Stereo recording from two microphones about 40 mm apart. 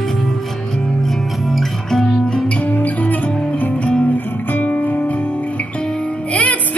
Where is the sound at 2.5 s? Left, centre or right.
Left.